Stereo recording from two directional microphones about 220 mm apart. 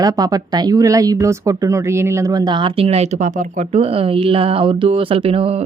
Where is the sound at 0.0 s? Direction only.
15° right (ahead or behind).